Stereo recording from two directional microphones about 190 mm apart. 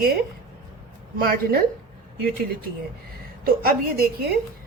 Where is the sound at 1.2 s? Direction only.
50° right (ahead or behind).